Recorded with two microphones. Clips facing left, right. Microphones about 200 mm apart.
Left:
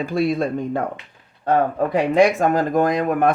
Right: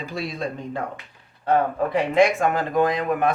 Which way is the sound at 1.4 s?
40° left (ahead or behind).